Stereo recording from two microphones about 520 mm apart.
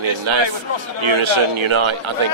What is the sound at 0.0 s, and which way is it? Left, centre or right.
Speech, right.